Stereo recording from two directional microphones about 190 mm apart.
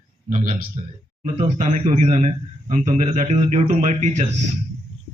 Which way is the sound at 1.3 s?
35° right (ahead or behind).